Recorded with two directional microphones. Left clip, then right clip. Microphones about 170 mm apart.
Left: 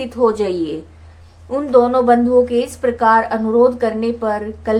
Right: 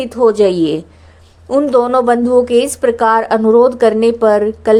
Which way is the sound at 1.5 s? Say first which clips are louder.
Right 2 dB; 40° right (ahead or behind).